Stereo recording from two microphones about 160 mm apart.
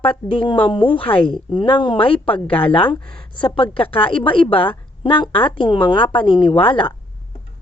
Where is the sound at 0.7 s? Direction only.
30° left (ahead or behind).